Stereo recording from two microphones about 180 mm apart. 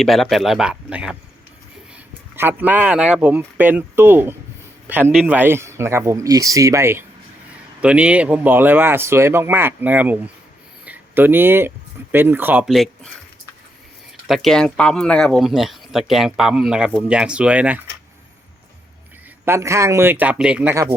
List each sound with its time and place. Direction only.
0.0 s speech: centre (ahead or behind)
2.3 s speech: 10° right (ahead or behind)
12.7 s speech: centre (ahead or behind)
14.3 s speech: centre (ahead or behind)
19.5 s speech: 15° right (ahead or behind)